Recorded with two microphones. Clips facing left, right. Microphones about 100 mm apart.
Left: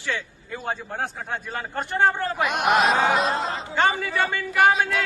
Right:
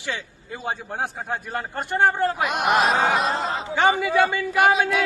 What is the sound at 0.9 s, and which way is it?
A man's voice, 10° right (ahead or behind).